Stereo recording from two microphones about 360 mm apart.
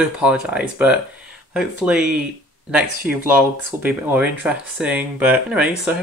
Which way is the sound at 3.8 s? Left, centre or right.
Centre.